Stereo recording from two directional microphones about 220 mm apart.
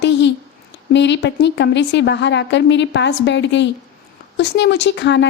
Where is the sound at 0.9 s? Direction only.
55° left (ahead or behind).